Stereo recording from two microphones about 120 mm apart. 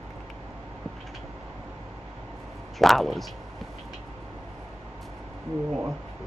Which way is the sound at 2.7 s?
Centre (ahead or behind).